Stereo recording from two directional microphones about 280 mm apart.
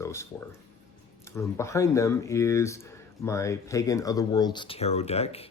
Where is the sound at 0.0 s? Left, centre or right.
Centre.